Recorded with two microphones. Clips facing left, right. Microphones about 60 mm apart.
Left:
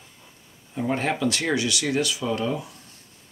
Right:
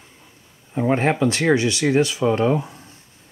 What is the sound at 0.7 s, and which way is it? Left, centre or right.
Speech, right.